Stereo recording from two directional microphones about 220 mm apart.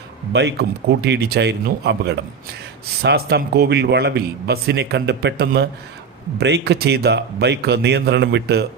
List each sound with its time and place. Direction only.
0.3 s a man's voice: 50° right (ahead or behind)